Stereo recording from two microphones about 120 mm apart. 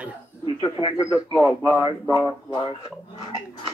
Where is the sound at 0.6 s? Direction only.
45° left (ahead or behind).